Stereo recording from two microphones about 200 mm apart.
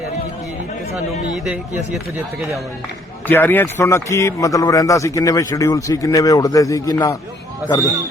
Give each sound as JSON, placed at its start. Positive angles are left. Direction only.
{"t": 1.5, "sound": "speech", "side_deg": -5}
{"t": 3.2, "sound": "a man's voice", "side_deg": 10}